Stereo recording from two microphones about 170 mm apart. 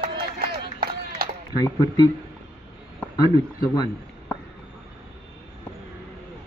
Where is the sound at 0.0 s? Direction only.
60° right (ahead or behind).